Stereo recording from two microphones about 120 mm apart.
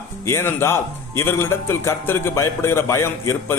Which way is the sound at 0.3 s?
20° left (ahead or behind).